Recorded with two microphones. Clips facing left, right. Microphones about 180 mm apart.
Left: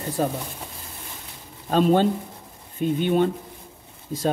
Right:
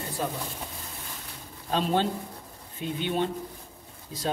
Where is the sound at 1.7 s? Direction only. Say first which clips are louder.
Left 7 dB; 50° left (ahead or behind).